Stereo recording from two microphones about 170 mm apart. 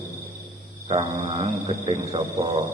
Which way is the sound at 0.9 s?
35° right (ahead or behind).